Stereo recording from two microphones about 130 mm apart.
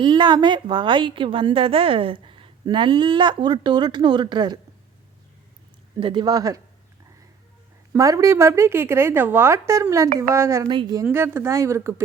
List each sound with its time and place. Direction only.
0.0 s a woman's voice: 35° right (ahead or behind)
6.0 s a woman's voice: 40° right (ahead or behind)
7.9 s a woman's voice: 25° right (ahead or behind)
10.7 s a woman's voice: 35° right (ahead or behind)
11.1 s a woman's voice: 20° right (ahead or behind)